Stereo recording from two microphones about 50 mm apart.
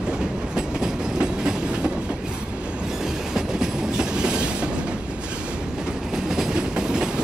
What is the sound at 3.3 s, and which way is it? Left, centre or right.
Train, centre.